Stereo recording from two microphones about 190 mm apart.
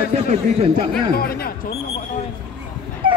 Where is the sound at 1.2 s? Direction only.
55° left (ahead or behind).